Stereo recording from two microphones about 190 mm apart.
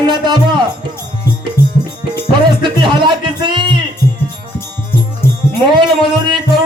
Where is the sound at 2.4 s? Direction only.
25° right (ahead or behind).